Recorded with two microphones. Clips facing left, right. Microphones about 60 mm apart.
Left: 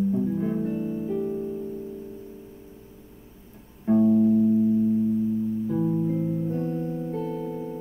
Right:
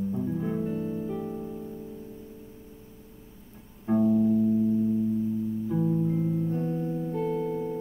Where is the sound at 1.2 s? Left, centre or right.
Centre.